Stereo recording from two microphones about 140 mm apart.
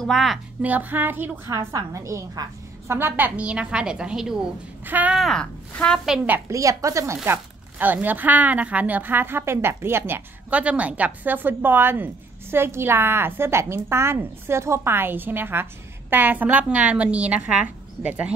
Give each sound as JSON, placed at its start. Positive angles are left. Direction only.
{"t": 0.0, "sound": "speech", "side_deg": 0}
{"t": 0.6, "sound": "a woman's voice", "side_deg": -10}
{"t": 5.2, "sound": "speech", "side_deg": 5}
{"t": 6.0, "sound": "a woman's voice", "side_deg": -10}
{"t": 6.5, "sound": "a woman's voice", "side_deg": -25}